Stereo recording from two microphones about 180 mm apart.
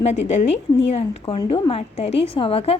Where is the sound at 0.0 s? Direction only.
35° left (ahead or behind).